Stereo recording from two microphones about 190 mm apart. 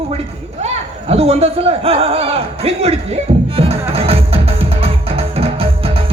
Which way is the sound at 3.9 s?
30° right (ahead or behind).